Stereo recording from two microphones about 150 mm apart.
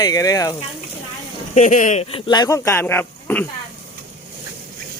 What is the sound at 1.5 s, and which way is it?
Speech, 60° left (ahead or behind).